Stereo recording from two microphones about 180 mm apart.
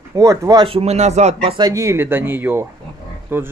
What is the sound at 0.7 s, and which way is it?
Speech, 35° right (ahead or behind).